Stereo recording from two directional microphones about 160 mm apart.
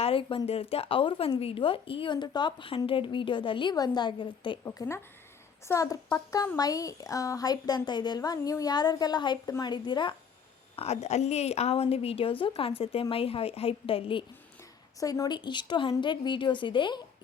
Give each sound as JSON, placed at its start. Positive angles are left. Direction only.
{"t": 0.0, "sound": "speech", "side_deg": 35}
{"t": 10.8, "sound": "speech", "side_deg": 40}
{"t": 14.9, "sound": "speech", "side_deg": 20}